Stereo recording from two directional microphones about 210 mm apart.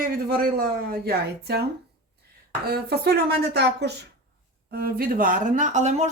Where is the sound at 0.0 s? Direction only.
45° right (ahead or behind).